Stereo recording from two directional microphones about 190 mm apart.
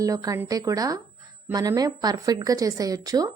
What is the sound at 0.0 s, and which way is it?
Speech, 20° right (ahead or behind).